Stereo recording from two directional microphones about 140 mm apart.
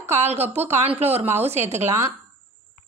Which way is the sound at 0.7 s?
50° right (ahead or behind).